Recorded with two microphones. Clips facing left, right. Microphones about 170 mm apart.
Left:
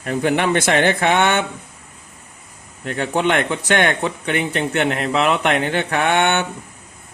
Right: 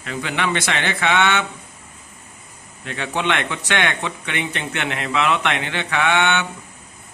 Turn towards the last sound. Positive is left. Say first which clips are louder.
# left 2 dB
turn(degrees=50)  # may be behind; listen again after turning